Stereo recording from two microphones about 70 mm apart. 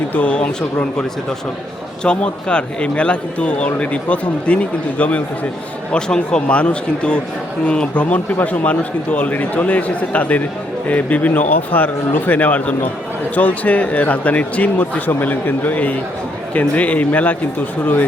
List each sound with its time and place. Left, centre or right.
0.1 s a man's voice: centre
2.0 s a man's voice: centre